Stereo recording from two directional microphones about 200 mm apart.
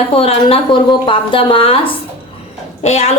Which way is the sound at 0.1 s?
30° left (ahead or behind).